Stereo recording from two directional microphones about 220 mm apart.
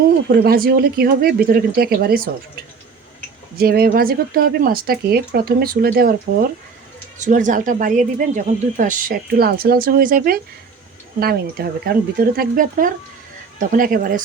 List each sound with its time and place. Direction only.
0.3 s speech: 45° right (ahead or behind)
3.6 s speech: 45° right (ahead or behind)
7.3 s speech: 35° right (ahead or behind)